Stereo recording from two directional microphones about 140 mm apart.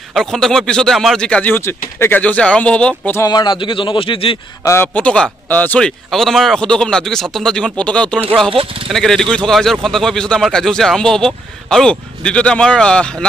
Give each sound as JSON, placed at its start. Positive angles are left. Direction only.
{"t": 0.1, "sound": "speech", "side_deg": 5}
{"t": 3.2, "sound": "a man's voice", "side_deg": 30}
{"t": 4.6, "sound": "speech", "side_deg": 15}